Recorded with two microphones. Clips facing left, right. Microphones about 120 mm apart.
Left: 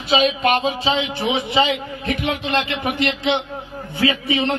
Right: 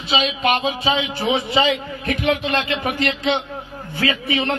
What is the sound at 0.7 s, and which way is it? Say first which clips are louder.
A man's voice: even; 25° left (ahead or behind).